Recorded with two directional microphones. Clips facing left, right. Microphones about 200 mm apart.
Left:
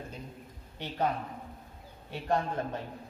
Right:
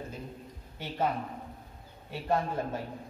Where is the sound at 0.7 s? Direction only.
5° right (ahead or behind).